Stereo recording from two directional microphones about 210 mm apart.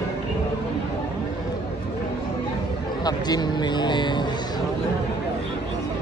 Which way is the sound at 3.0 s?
20° left (ahead or behind).